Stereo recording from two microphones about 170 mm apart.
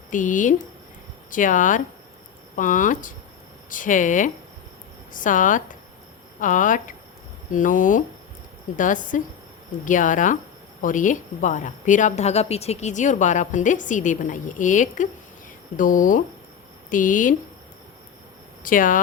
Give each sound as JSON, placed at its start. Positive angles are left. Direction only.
{"t": 0.1, "sound": "speech", "side_deg": 50}
{"t": 18.6, "sound": "speech", "side_deg": 50}